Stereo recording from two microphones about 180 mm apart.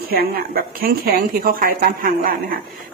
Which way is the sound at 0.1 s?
55° right (ahead or behind).